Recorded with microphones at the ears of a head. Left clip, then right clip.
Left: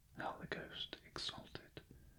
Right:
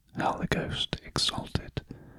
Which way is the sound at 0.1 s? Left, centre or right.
Right.